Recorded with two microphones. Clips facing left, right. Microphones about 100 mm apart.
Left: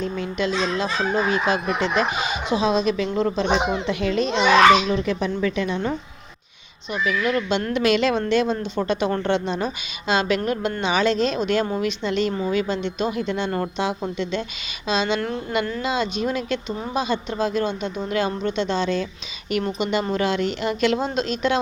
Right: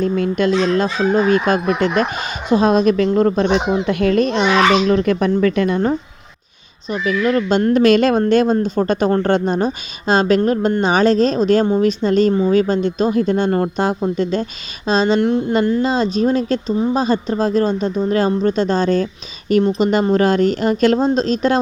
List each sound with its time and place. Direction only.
0.0 s speech: 50° right (ahead or behind)